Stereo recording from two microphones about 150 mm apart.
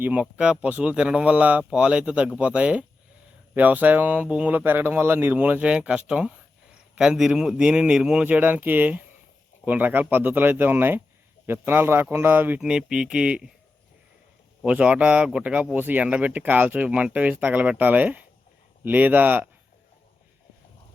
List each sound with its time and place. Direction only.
0.0 s speech: 10° right (ahead or behind)
14.6 s speech: 10° right (ahead or behind)